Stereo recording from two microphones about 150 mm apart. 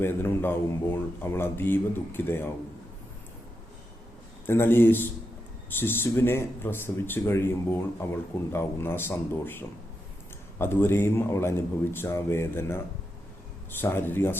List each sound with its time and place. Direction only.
0.0 s speech: 15° left (ahead or behind)
4.4 s speech: 15° left (ahead or behind)